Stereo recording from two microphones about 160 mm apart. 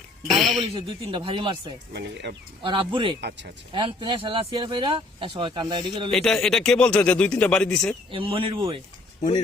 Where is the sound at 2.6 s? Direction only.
30° right (ahead or behind).